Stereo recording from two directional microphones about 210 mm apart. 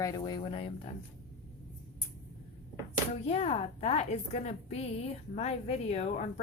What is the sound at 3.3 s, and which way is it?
A woman's voice, 30° left (ahead or behind).